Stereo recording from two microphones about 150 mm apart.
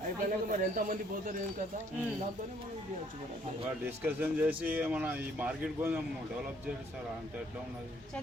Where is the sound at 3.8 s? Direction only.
15° right (ahead or behind).